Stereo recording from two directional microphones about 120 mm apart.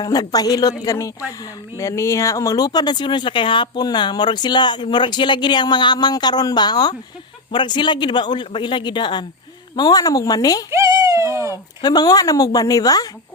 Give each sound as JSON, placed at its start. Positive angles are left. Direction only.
{"t": 0.0, "sound": "speech", "side_deg": 30}
{"t": 10.7, "sound": "a sound", "side_deg": -25}
{"t": 11.8, "sound": "speech", "side_deg": 35}